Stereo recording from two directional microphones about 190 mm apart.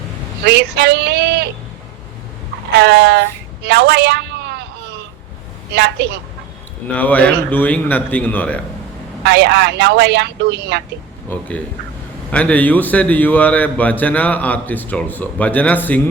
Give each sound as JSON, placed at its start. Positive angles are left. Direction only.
{"t": 0.4, "sound": "speech", "side_deg": -60}
{"t": 2.7, "sound": "a woman's voice", "side_deg": -60}
{"t": 5.7, "sound": "speech", "side_deg": -60}
{"t": 6.8, "sound": "a man's voice", "side_deg": 10}
{"t": 9.2, "sound": "speech", "side_deg": -65}
{"t": 11.3, "sound": "a man's voice", "side_deg": 10}